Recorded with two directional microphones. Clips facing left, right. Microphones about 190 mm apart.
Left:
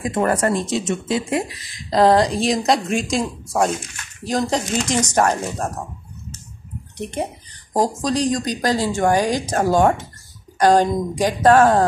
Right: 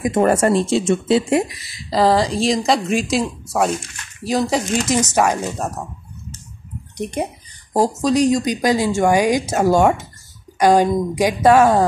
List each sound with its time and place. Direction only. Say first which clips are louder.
0.0 s speech: right 4 dB; 25° right (ahead or behind)
1.5 s a woman's voice: left 1 dB; 10° right (ahead or behind)
7.7 s speech: right 3 dB; 10° right (ahead or behind)